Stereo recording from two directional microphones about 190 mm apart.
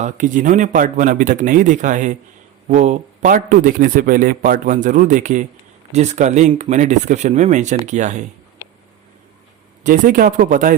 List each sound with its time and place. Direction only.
0.0 s speech: 40° right (ahead or behind)
8.6 s a sound: 15° right (ahead or behind)
9.8 s speech: 45° right (ahead or behind)